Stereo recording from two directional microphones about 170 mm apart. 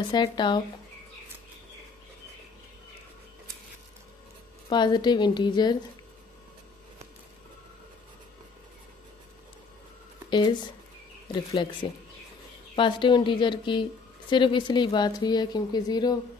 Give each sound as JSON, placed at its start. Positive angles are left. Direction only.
{"t": 0.1, "sound": "speech", "side_deg": 25}
{"t": 4.6, "sound": "speech", "side_deg": 25}
{"t": 10.3, "sound": "speech", "side_deg": 25}
{"t": 11.8, "sound": "speech", "side_deg": 25}